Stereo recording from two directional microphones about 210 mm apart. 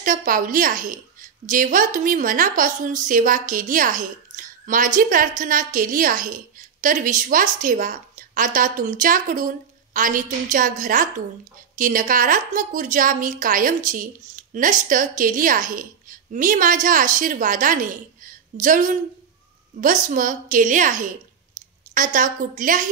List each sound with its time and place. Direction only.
0.0 s a woman's voice: 40° right (ahead or behind)
21.6 s a sound: 40° right (ahead or behind)
21.9 s a woman's voice: 40° right (ahead or behind)